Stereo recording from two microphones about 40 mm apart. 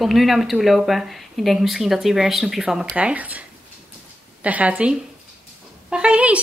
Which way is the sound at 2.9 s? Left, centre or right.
Right.